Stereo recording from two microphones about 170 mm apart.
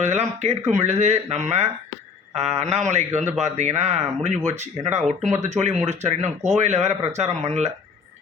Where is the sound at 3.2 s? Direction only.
40° right (ahead or behind).